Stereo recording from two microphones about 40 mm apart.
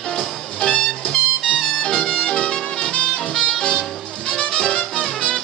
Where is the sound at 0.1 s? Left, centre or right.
Centre.